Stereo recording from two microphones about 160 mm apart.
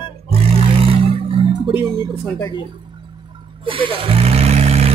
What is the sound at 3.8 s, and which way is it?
Vehicle, 40° right (ahead or behind).